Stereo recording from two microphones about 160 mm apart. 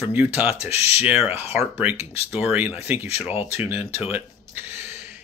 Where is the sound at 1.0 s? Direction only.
10° right (ahead or behind).